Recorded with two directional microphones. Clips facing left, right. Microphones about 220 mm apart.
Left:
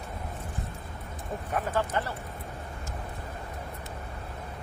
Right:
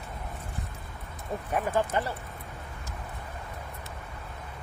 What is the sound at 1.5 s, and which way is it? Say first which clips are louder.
Speech: right 2 dB; 15° right (ahead or behind).